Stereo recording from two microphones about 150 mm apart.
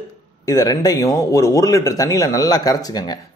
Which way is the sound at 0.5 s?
25° left (ahead or behind).